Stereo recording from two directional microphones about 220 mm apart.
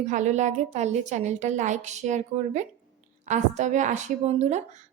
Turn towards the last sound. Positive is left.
turn(degrees=-30)  # may be behind; listen again after turning